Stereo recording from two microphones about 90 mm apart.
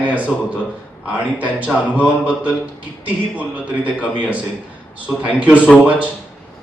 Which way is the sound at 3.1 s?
15° right (ahead or behind).